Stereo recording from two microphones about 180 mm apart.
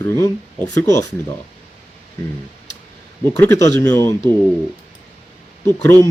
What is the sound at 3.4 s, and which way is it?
Speech, 15° left (ahead or behind).